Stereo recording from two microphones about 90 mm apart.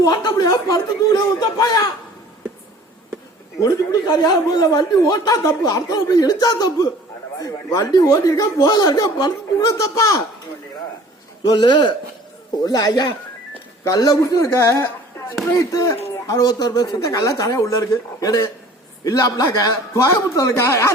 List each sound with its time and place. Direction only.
0.0 s a man's voice: 50° left (ahead or behind)
3.6 s a man's voice: 45° left (ahead or behind)
5.5 s a man's voice: 40° left (ahead or behind)
11.4 s speech: 50° left (ahead or behind)
12.6 s a man's voice: 45° left (ahead or behind)
15.5 s a man's voice: 40° left (ahead or behind)